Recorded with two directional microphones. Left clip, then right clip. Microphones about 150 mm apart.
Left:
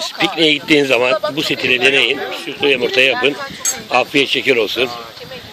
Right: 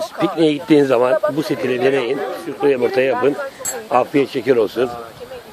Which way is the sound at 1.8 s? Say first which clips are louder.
Left 4 dB; 30° right (ahead or behind).